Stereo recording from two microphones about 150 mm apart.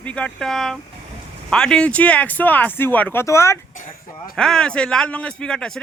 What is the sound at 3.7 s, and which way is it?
Speech, 60° left (ahead or behind).